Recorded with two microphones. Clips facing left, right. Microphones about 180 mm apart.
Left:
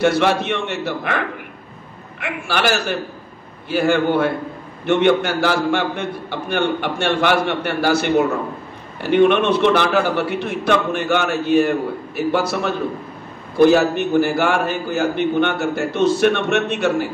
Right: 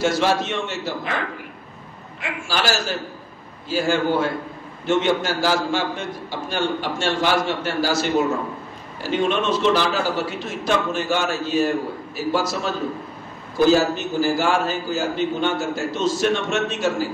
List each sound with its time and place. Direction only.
0.0 s a man's voice: 60° left (ahead or behind)